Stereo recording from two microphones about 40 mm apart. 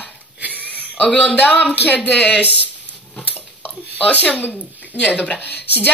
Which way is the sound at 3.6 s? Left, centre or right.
Left.